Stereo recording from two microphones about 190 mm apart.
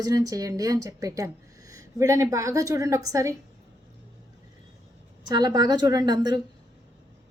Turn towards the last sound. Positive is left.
turn(degrees=-20)  # may be behind; listen again after turning